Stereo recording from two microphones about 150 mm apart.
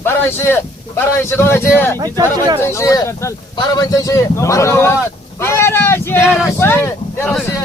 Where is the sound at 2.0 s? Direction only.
25° right (ahead or behind).